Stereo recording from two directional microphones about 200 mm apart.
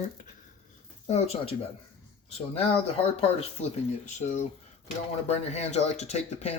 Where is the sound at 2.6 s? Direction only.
30° left (ahead or behind).